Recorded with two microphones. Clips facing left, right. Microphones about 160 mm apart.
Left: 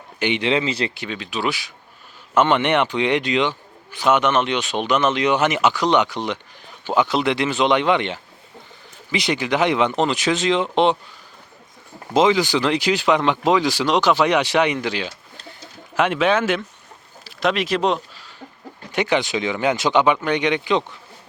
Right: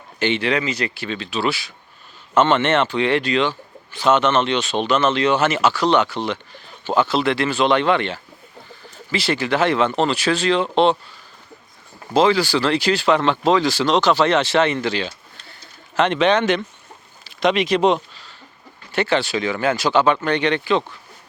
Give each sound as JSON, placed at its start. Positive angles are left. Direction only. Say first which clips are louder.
{"t": 0.2, "sound": "speech", "louder": "even", "side_deg": 15}
{"t": 12.1, "sound": "speech", "louder": "even", "side_deg": 15}
{"t": 18.9, "sound": "speech", "louder": "even", "side_deg": 15}